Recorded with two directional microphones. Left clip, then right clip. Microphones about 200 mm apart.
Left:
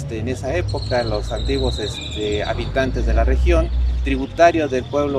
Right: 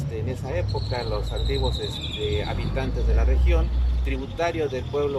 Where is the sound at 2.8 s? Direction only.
55° left (ahead or behind).